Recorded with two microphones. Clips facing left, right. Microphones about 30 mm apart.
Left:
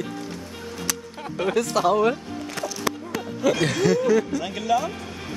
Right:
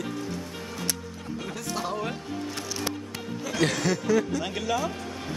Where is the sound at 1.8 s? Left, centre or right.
Left.